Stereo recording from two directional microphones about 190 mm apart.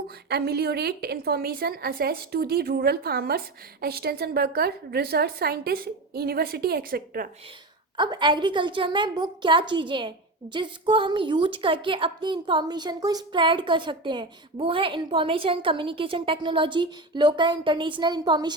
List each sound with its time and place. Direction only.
0.3 s a woman's voice: 55° right (ahead or behind)
7.9 s a woman's voice: 25° right (ahead or behind)